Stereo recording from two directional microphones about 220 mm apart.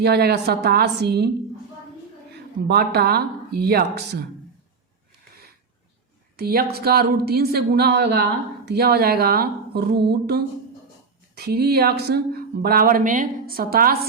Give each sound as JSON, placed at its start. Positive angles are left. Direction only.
{"t": 0.0, "sound": "speech", "side_deg": -45}
{"t": 2.6, "sound": "speech", "side_deg": -50}
{"t": 6.3, "sound": "speech", "side_deg": -45}